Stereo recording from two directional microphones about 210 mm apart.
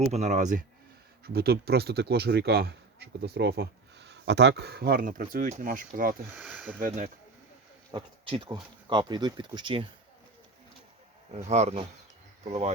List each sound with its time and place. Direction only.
0.1 s speech: 35° right (ahead or behind)
1.2 s speech: 50° right (ahead or behind)
6.3 s speech: centre (ahead or behind)
6.7 s speech: 40° right (ahead or behind)
7.9 s speech: 20° right (ahead or behind)
11.4 s speech: 30° right (ahead or behind)